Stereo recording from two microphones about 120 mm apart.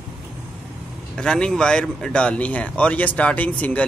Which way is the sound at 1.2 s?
5° left (ahead or behind).